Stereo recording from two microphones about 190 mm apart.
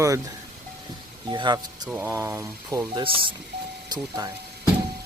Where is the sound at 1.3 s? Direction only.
20° right (ahead or behind).